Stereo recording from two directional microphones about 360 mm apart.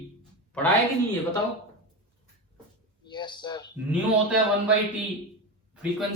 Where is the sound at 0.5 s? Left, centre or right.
Centre.